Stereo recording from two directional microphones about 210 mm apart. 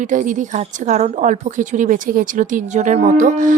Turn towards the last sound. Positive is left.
turn(degrees=-35)  # may be behind; listen again after turning